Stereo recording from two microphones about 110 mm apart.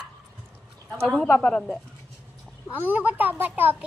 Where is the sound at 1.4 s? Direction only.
10° left (ahead or behind).